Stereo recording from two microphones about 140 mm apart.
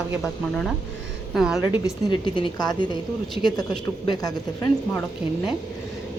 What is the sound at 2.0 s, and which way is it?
Speech, 35° left (ahead or behind).